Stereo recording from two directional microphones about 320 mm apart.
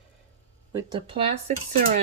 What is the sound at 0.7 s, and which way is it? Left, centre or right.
Speech, centre.